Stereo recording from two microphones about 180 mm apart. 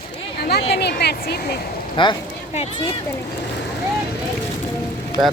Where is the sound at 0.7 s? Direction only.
65° left (ahead or behind).